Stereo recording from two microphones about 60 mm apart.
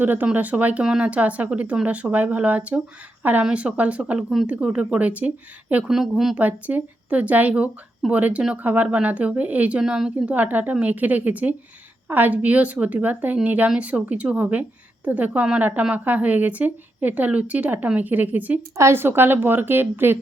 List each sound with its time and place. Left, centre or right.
0.0 s a woman's voice: right
4.2 s speech: centre
4.4 s a woman's voice: centre
5.9 s speech: centre
6.3 s a woman's voice: right; by 10.3 s centre
10.3 s a woman's voice: right
18.8 s a woman's voice: right